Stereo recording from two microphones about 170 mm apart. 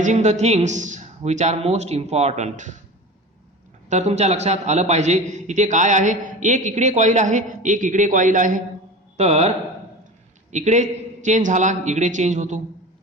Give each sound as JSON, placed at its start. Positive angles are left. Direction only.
{"t": 0.0, "sound": "speech", "side_deg": -45}
{"t": 3.8, "sound": "a man's voice", "side_deg": -40}
{"t": 9.1, "sound": "speech", "side_deg": -40}
{"t": 10.5, "sound": "a man's voice", "side_deg": -45}